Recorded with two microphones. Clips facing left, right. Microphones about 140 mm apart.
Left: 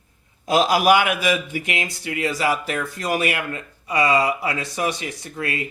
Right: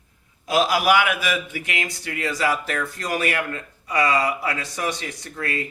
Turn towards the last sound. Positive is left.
turn(degrees=10)  # may be behind; listen again after turning